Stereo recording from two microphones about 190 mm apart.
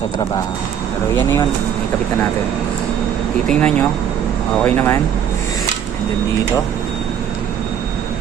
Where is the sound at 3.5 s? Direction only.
5° left (ahead or behind).